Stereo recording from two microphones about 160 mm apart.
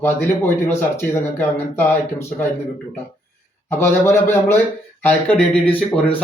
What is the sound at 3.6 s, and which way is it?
Speech, 15° left (ahead or behind).